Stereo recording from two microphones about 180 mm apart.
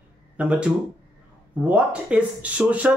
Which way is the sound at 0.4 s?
5° right (ahead or behind).